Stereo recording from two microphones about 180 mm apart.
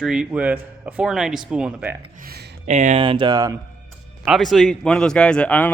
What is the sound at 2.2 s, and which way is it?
Speech, 60° right (ahead or behind).